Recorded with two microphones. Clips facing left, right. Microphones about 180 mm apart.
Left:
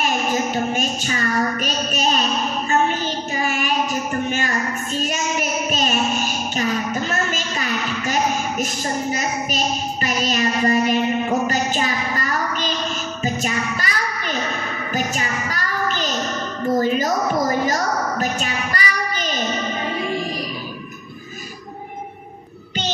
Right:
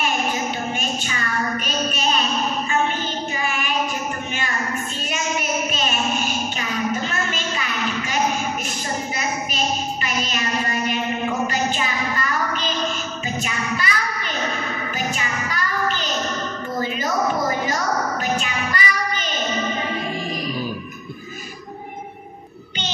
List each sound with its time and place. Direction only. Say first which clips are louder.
0.3 s child singing: left 4 dB; 40° left (ahead or behind)
3.4 s child singing: left 4 dB; 40° left (ahead or behind)
5.1 s child singing: left 1 dB; 40° left (ahead or behind)
6.6 s a sound: left 3 dB; 40° left (ahead or behind)
10.0 s child singing: left 5 dB; 40° left (ahead or behind)
11.4 s a sound: left 2 dB; 40° left (ahead or behind)
13.2 s music: left 6 dB; 40° left (ahead or behind)
15.0 s child singing: left 5 dB; 40° left (ahead or behind)
16.8 s a sound: left 6 dB; 40° left (ahead or behind)
17.6 s child singing: left 2 dB; 40° left (ahead or behind)